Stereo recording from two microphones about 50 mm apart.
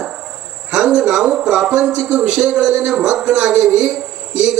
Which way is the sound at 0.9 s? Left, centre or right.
Centre.